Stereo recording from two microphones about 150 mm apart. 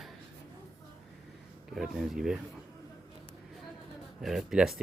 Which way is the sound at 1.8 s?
5° right (ahead or behind).